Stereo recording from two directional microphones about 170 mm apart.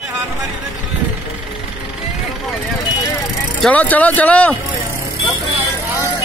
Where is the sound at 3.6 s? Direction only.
10° left (ahead or behind).